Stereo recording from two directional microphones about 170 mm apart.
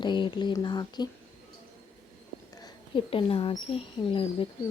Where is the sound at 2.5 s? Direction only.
25° left (ahead or behind).